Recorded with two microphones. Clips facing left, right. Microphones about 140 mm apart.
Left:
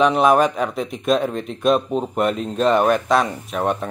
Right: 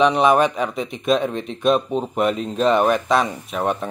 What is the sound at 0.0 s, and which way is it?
Speech, centre (ahead or behind).